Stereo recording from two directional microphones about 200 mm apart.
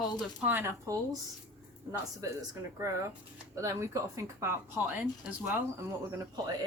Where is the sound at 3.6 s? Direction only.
15° right (ahead or behind).